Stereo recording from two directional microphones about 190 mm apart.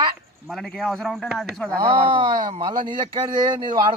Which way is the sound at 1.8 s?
25° right (ahead or behind).